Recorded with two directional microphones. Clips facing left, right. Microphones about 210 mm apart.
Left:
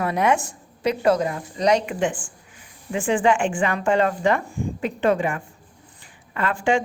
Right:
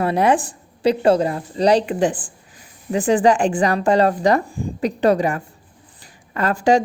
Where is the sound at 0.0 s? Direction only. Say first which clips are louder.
Right 4 dB; 30° right (ahead or behind).